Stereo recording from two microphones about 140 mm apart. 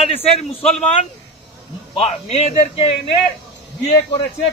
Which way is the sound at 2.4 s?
45° left (ahead or behind).